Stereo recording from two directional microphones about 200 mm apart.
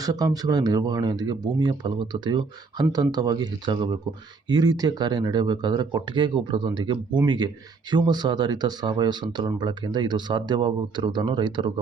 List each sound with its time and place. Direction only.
0.0 s speech: 20° right (ahead or behind)